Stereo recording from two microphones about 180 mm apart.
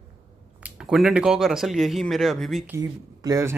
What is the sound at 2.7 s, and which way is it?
Speech, 20° right (ahead or behind).